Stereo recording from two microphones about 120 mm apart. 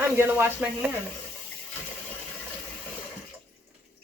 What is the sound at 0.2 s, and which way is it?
Speech, 15° right (ahead or behind).